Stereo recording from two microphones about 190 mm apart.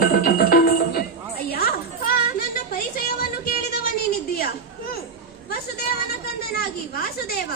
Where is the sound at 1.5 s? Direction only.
55° left (ahead or behind).